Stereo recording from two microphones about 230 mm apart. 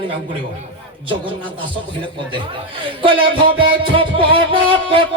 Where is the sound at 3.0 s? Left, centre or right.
Right.